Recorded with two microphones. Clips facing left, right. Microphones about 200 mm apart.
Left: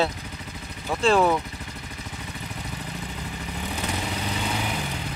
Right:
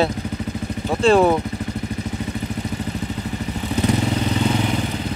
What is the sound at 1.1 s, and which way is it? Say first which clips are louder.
Speech: right 5 dB; 30° right (ahead or behind).